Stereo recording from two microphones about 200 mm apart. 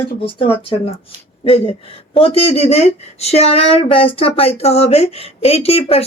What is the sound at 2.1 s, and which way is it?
A woman's voice, 30° left (ahead or behind).